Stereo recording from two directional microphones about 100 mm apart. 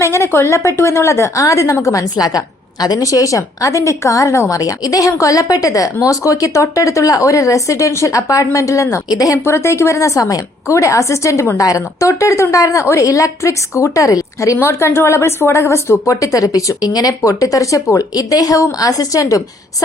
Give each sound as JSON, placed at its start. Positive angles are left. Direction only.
{"t": 0.0, "sound": "a woman's voice", "side_deg": 25}